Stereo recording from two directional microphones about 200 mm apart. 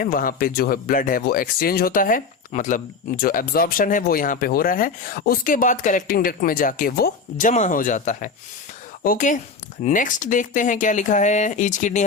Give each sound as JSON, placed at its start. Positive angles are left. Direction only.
{"t": 0.0, "sound": "speech", "side_deg": 45}